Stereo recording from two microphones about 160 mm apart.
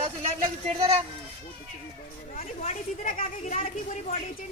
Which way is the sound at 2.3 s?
45° left (ahead or behind).